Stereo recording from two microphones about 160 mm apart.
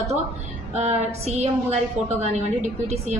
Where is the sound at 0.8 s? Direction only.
45° right (ahead or behind).